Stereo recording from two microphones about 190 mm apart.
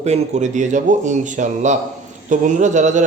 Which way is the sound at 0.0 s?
35° right (ahead or behind).